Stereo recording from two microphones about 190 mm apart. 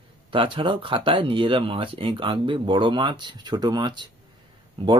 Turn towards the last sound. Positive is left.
turn(degrees=-25)  # may be behind; listen again after turning